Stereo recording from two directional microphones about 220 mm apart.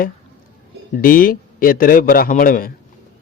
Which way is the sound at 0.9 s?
40° left (ahead or behind).